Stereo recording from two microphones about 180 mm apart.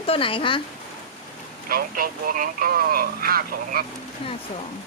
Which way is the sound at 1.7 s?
55° right (ahead or behind).